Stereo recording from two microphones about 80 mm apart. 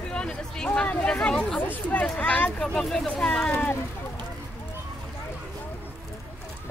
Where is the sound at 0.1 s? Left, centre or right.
Centre.